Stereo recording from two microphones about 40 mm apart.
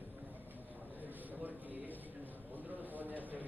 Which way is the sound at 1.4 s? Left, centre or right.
Right.